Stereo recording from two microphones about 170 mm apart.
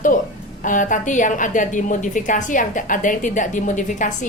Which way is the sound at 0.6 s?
50° left (ahead or behind).